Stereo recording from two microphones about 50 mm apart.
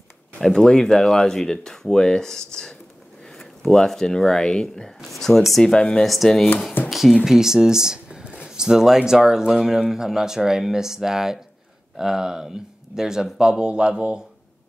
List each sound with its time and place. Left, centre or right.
0.4 s speech: centre
5.0 s speech: centre
5.6 s speech: centre
6.0 s speech: centre
6.9 s a sound: centre
7.2 s speech: centre